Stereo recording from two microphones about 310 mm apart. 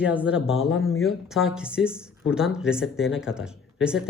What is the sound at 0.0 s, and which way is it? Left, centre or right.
Speech, centre.